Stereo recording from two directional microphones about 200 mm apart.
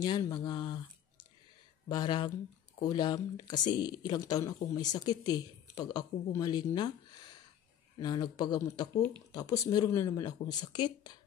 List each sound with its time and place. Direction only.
0.0 s speech: 20° left (ahead or behind)
8.0 s speech: 20° left (ahead or behind)